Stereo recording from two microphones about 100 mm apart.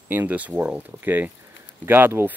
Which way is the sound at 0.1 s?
20° right (ahead or behind).